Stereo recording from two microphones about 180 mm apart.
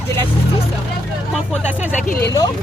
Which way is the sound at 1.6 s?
10° right (ahead or behind).